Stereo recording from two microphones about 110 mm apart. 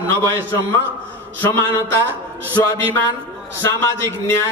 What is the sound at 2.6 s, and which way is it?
Speech, 30° left (ahead or behind).